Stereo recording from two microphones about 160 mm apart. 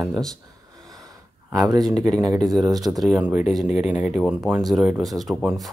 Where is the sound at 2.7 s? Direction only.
25° right (ahead or behind).